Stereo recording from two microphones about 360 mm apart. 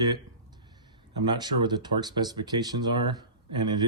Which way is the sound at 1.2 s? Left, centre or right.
Centre.